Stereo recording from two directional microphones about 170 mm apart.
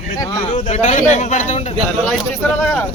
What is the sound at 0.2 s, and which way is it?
Speech, 20° left (ahead or behind).